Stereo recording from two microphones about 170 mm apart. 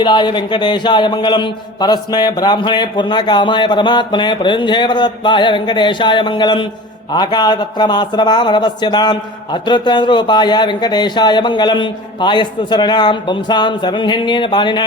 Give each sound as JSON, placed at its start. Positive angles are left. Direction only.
{"t": 0.0, "sound": "speech", "side_deg": 25}